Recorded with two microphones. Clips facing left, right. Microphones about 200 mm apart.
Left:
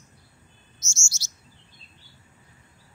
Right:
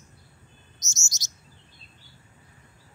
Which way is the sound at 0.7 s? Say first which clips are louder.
Left 2 dB; 20° right (ahead or behind).